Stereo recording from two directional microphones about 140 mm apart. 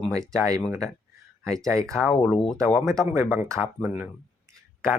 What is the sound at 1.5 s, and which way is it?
Speech, 20° right (ahead or behind).